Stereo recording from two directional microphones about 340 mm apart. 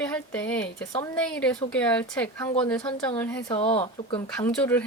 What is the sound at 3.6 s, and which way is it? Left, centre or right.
Speech, centre.